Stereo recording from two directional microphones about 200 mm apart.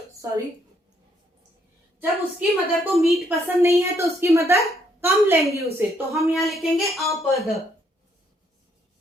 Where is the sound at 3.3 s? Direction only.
10° right (ahead or behind).